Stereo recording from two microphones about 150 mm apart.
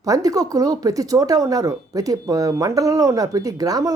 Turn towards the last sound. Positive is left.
turn(degrees=-25)  # may be behind; listen again after turning